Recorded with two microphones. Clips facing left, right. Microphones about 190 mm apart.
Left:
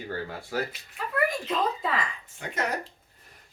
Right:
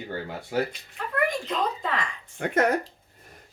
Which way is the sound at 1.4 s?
5° left (ahead or behind).